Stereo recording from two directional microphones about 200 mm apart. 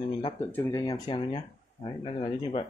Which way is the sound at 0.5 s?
10° left (ahead or behind).